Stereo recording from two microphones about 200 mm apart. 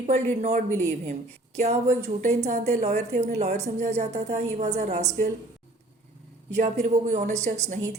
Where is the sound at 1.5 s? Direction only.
35° right (ahead or behind).